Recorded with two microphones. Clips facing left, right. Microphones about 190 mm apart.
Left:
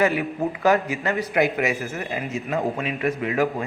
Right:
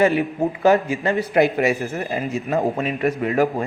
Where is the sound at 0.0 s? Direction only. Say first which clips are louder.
Right 4 dB; 30° right (ahead or behind).